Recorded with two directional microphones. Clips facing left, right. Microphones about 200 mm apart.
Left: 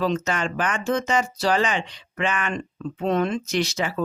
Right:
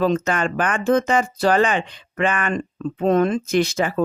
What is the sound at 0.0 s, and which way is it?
Speech, 50° right (ahead or behind).